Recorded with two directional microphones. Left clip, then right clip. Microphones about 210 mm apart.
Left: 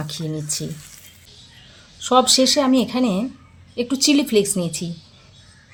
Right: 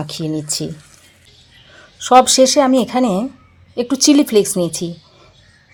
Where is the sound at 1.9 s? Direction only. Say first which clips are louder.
Right 6 dB; 25° right (ahead or behind).